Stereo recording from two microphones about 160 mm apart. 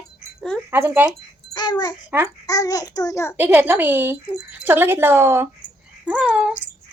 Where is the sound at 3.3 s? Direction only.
10° right (ahead or behind).